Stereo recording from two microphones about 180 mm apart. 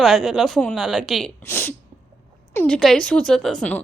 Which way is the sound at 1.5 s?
15° left (ahead or behind).